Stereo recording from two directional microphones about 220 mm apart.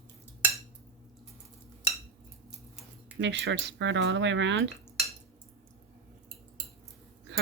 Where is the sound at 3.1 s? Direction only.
55° right (ahead or behind).